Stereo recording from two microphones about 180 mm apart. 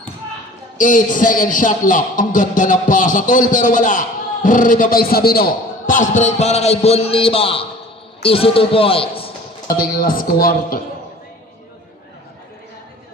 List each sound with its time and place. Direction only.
0.8 s a man's voice: 45° left (ahead or behind); by 9.3 s 30° left (ahead or behind)
9.6 s a man's voice: 50° left (ahead or behind)